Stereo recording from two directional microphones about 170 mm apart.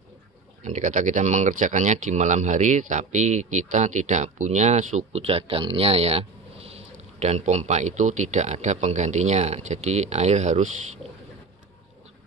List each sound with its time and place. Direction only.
0.7 s speech: 45° right (ahead or behind)